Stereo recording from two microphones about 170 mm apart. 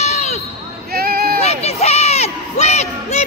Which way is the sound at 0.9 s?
65° right (ahead or behind).